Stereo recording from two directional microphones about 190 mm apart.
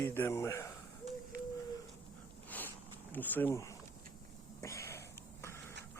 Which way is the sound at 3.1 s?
10° left (ahead or behind).